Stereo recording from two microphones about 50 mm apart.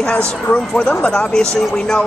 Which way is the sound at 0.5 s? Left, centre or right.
Left.